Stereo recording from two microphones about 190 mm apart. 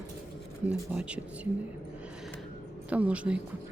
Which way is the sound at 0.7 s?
5° right (ahead or behind).